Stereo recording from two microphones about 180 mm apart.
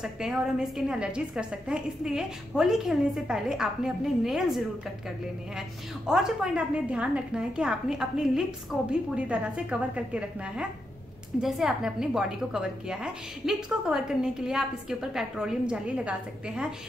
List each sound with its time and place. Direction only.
0.0 s a woman's voice: 5° right (ahead or behind)
6.0 s a woman's voice: 5° right (ahead or behind)